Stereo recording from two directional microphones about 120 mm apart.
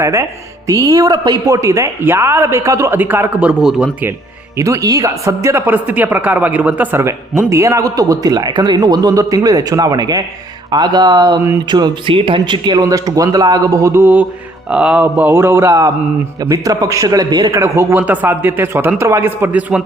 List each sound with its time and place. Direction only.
0.0 s speech: 25° right (ahead or behind)
3.6 s speech: 5° right (ahead or behind)
4.5 s speech: 25° right (ahead or behind)
12.8 s speech: 30° right (ahead or behind)